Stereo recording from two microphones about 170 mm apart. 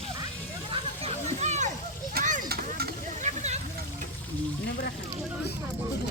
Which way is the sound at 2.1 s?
45° right (ahead or behind).